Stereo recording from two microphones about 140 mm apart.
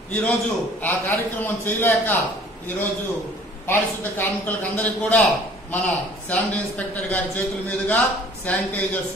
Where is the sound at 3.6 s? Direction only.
15° left (ahead or behind).